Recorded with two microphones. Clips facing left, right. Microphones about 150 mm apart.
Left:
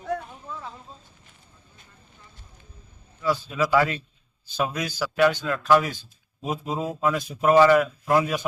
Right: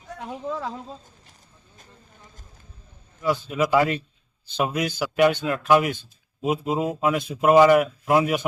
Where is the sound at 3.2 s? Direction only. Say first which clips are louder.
Right 2 dB; 20° right (ahead or behind).